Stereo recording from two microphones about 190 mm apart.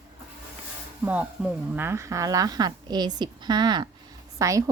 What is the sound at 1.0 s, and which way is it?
A woman's voice, 5° right (ahead or behind).